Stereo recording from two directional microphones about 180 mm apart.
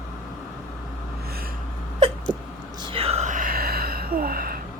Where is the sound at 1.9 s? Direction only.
35° right (ahead or behind).